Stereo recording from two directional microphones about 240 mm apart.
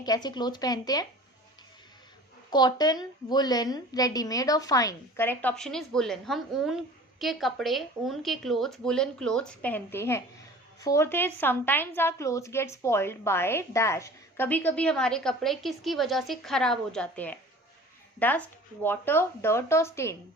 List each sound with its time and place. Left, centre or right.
0.0 s a woman's voice: centre
2.5 s a woman's voice: centre